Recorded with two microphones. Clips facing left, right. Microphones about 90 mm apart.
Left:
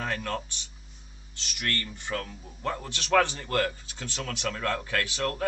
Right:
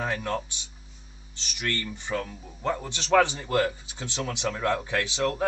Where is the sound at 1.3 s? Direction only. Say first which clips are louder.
Even; 60° left (ahead or behind).